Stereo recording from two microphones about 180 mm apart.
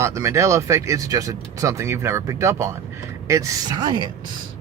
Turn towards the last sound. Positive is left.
turn(degrees=-20)  # may be behind; listen again after turning